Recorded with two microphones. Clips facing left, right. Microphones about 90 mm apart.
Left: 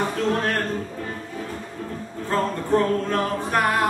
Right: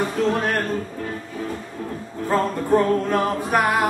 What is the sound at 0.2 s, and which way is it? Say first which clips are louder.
Music: right 4 dB; 10° right (ahead or behind).